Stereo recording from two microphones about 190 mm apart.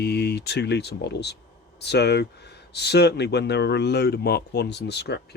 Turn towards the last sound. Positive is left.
turn(degrees=60)  # may be behind; listen again after turning